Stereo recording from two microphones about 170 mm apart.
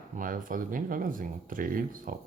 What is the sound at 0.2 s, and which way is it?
Speech, 50° right (ahead or behind).